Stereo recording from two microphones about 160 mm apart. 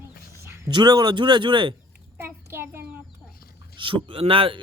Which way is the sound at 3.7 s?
30° right (ahead or behind).